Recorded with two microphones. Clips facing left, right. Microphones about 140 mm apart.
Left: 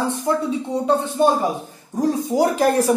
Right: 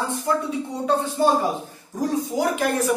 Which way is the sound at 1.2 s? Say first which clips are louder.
Left 3 dB; 20° left (ahead or behind).